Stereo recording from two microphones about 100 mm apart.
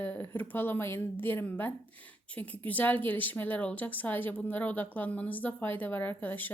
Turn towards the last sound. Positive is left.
turn(degrees=20)  # may be behind; listen again after turning